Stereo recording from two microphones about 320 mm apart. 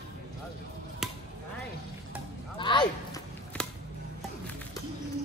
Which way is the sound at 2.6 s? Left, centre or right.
Centre.